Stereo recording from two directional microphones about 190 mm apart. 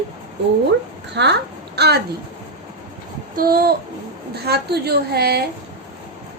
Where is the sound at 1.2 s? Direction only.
65° right (ahead or behind).